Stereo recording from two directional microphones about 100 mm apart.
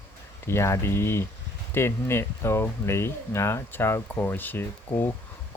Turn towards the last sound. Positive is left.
turn(degrees=20)  # may be behind; listen again after turning